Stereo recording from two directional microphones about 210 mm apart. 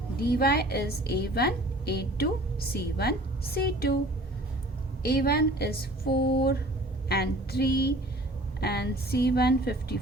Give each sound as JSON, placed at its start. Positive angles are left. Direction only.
{"t": 0.2, "sound": "a woman's voice", "side_deg": 45}
{"t": 5.0, "sound": "a woman's voice", "side_deg": 45}